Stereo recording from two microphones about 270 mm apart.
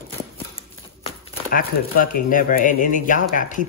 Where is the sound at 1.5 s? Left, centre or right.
Left.